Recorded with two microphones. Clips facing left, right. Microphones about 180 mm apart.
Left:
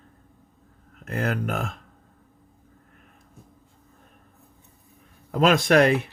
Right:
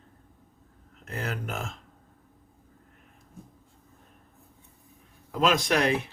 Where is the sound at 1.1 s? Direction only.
60° left (ahead or behind).